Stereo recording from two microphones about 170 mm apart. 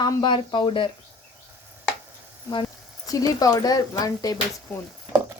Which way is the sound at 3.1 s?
20° left (ahead or behind).